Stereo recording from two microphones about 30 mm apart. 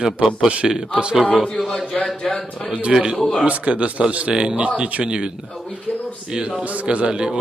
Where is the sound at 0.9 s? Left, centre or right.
Right.